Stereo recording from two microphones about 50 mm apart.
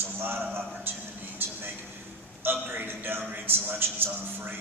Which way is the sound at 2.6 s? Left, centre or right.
Right.